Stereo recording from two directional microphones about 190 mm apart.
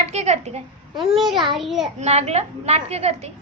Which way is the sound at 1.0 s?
Centre (ahead or behind).